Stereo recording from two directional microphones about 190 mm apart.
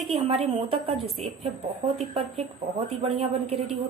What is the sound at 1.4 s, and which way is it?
Speech, 30° right (ahead or behind).